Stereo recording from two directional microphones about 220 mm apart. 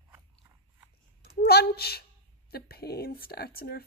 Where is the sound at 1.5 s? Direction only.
45° left (ahead or behind).